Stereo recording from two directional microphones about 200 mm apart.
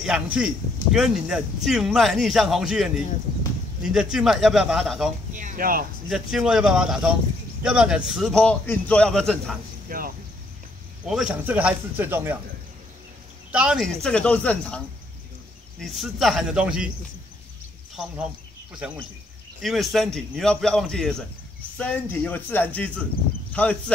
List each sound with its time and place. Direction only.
0.0 s speech: 5° right (ahead or behind)
5.3 s speech: 40° right (ahead or behind)
6.0 s speech: centre (ahead or behind)
9.8 s cricket: 45° right (ahead or behind)
11.1 s speech: 5° right (ahead or behind)
13.5 s speech: 5° right (ahead or behind)
15.8 s speech: centre (ahead or behind)
17.9 s speech: 5° right (ahead or behind)